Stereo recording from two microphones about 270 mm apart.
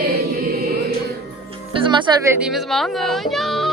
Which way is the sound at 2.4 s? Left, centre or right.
Centre.